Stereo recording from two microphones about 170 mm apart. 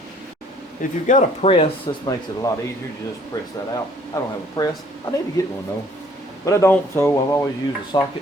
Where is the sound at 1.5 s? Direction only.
30° left (ahead or behind).